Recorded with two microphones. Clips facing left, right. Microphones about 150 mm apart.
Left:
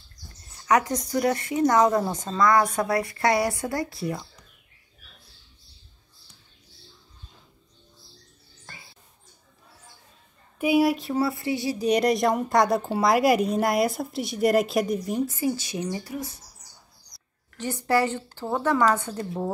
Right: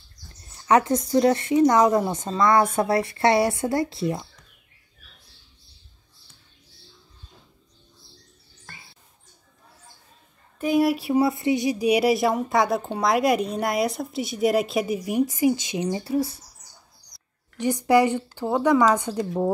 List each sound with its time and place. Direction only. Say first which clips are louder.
0.7 s speech: right 3 dB; 25° right (ahead or behind)
10.6 s a sound: even; 5° left (ahead or behind)
11.0 s speech: right 4 dB; 15° right (ahead or behind)
17.6 s a woman's voice: right 5 dB; 15° right (ahead or behind)